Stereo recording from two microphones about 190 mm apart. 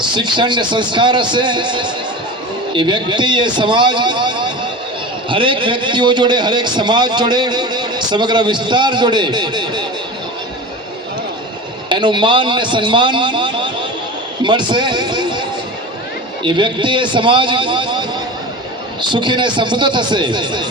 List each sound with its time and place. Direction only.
0.1 s a man's voice: 25° right (ahead or behind)
11.9 s a man's voice: 25° right (ahead or behind)
19.1 s a man's voice: 25° right (ahead or behind)